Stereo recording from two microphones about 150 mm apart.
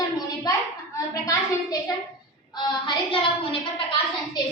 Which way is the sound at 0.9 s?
20° left (ahead or behind).